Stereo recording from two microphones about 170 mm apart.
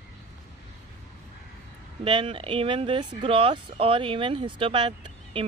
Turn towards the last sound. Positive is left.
turn(degrees=-30)  # may be behind; listen again after turning